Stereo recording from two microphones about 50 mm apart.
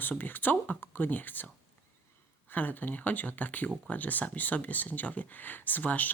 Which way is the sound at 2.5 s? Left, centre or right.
Left.